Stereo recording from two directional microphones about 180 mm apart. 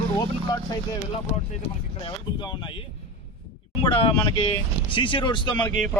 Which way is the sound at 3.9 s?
30° left (ahead or behind).